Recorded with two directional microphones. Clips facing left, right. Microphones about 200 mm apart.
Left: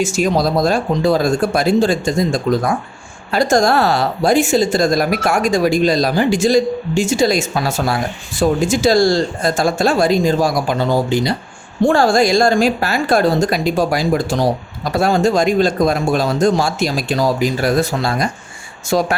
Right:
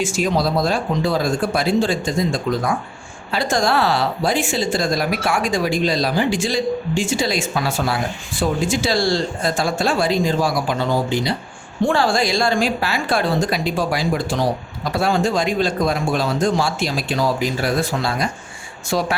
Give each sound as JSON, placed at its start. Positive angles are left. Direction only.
{"t": 0.0, "sound": "speech", "side_deg": 45}